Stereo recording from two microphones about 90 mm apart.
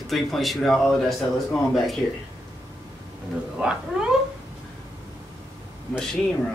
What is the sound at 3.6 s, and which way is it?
Speech, 15° right (ahead or behind).